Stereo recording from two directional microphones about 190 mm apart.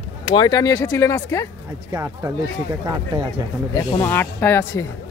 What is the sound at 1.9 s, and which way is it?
Speech, 15° right (ahead or behind).